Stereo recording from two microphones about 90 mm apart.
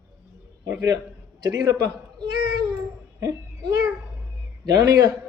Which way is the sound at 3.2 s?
35° right (ahead or behind).